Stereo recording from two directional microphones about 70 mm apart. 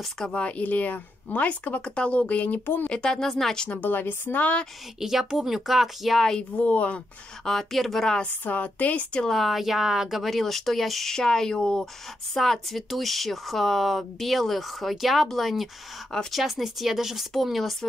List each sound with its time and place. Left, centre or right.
0.2 s speech: centre
2.9 s speech: centre
3.8 s speech: left
5.0 s speech: centre
6.6 s speech: centre
7.4 s speech: centre
8.5 s speech: left
9.2 s speech: centre